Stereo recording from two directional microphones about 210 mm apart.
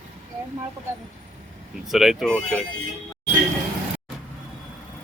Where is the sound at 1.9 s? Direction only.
Centre (ahead or behind).